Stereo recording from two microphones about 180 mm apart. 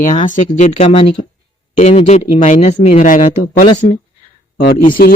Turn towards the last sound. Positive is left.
turn(degrees=50)  # may be behind; listen again after turning